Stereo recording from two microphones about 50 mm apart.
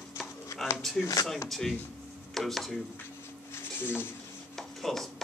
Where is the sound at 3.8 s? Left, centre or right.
Left.